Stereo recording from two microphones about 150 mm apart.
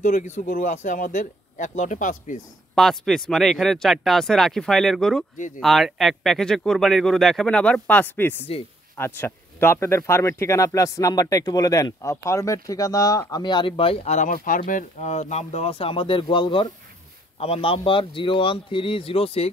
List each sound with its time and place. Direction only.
0.0 s speech: 55° left (ahead or behind)
2.7 s speech: centre (ahead or behind); by 14.3 s 45° left (ahead or behind)
14.3 s speech: 65° left (ahead or behind); by 19.5 s 40° left (ahead or behind)